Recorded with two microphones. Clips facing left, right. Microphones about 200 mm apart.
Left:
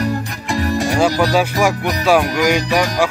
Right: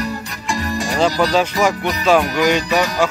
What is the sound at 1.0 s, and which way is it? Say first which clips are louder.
Speech: right 1 dB; 10° left (ahead or behind).